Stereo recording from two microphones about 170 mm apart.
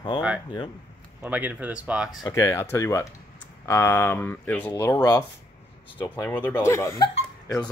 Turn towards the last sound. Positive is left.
turn(degrees=20)  # may be behind; listen again after turning